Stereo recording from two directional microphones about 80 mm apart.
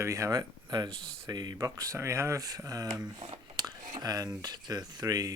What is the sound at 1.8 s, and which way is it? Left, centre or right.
Speech, right.